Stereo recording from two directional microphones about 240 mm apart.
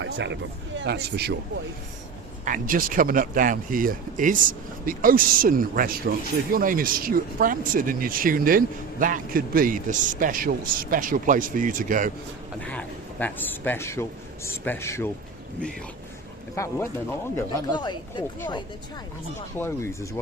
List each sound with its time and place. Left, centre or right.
0.0 s a sound: right
0.8 s speech: right
2.4 s speech: right
12.5 s a man's voice: centre
16.6 s a man's voice: centre